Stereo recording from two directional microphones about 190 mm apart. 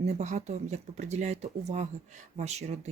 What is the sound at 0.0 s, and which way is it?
Speech, 35° right (ahead or behind).